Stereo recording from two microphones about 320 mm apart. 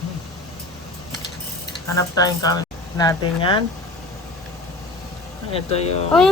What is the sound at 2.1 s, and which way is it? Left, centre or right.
Speech, centre.